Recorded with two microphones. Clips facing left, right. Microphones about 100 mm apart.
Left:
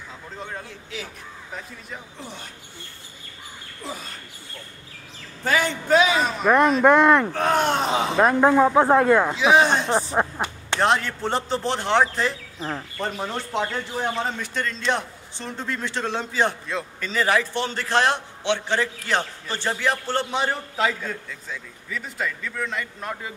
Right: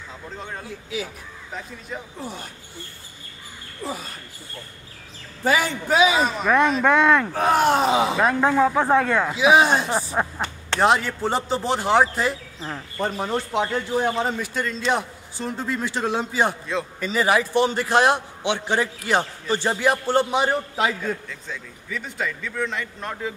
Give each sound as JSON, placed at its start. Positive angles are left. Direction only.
{"t": 0.4, "sound": "a man's voice", "side_deg": 0}
{"t": 5.4, "sound": "a man's voice", "side_deg": -5}
{"t": 7.3, "sound": "a man's voice", "side_deg": -5}
{"t": 8.2, "sound": "speech", "side_deg": 10}
{"t": 9.3, "sound": "a man's voice", "side_deg": -5}
{"t": 10.1, "sound": "a sound", "side_deg": 10}
{"t": 10.8, "sound": "a man's voice", "side_deg": -5}
{"t": 13.5, "sound": "a man's voice", "side_deg": -10}
{"t": 21.3, "sound": "a man's voice", "side_deg": 0}